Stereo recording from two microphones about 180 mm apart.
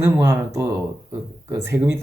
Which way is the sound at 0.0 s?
15° right (ahead or behind).